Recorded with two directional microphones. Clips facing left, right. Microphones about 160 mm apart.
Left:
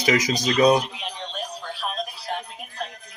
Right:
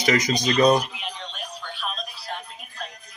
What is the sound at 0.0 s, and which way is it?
Speech, 5° left (ahead or behind).